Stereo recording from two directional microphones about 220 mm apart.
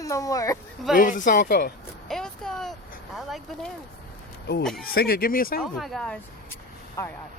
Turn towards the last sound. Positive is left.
turn(degrees=15)  # may be behind; listen again after turning